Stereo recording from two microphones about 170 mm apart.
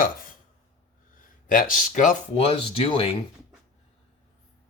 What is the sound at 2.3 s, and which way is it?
Speech, 35° left (ahead or behind).